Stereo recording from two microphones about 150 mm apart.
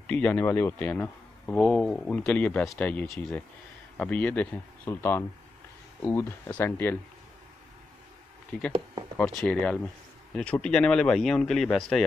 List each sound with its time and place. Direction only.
0.0 s speech: 10° left (ahead or behind)
8.5 s speech: 10° left (ahead or behind)